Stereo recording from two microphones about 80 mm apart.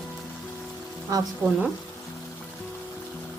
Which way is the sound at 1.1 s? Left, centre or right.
Right.